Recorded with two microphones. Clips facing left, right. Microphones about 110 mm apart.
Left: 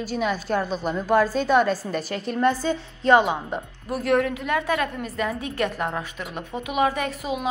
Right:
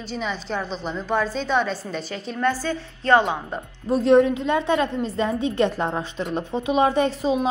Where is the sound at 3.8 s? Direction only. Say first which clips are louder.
Right 6 dB; 25° right (ahead or behind).